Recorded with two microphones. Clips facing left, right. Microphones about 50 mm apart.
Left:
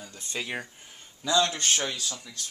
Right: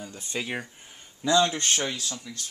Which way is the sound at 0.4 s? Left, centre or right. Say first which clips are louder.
Right 1 dB; centre.